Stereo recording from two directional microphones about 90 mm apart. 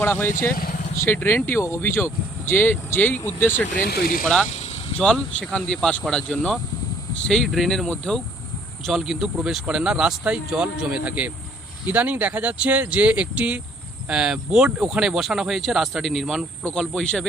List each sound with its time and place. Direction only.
0.0 s speech: 25° left (ahead or behind)
4.9 s speech: 10° left (ahead or behind)
8.9 s speech: 5° right (ahead or behind)